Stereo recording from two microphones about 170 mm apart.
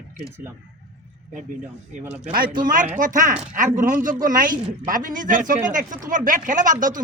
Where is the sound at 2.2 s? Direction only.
55° right (ahead or behind).